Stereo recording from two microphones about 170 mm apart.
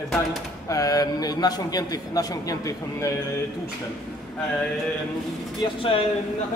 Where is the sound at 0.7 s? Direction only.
20° left (ahead or behind).